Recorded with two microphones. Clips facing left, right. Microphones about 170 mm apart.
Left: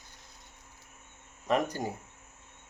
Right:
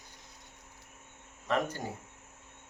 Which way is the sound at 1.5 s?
15° left (ahead or behind).